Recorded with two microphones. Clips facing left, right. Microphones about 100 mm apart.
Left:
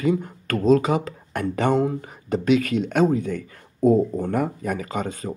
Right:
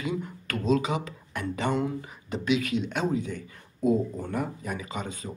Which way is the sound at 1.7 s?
45° left (ahead or behind).